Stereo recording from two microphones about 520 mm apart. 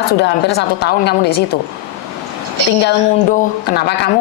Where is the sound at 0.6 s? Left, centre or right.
Centre.